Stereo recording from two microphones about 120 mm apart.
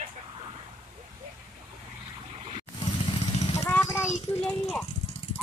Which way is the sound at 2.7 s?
40° left (ahead or behind).